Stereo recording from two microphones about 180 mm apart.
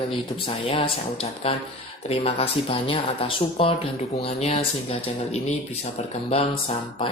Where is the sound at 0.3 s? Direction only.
30° left (ahead or behind).